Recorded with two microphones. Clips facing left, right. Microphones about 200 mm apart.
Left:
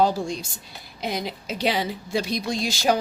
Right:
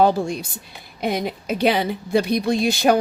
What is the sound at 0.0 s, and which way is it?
Speech, 60° right (ahead or behind).